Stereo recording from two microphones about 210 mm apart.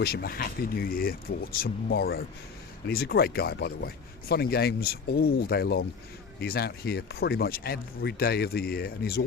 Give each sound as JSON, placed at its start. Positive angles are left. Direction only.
{"t": 0.0, "sound": "speech", "side_deg": 45}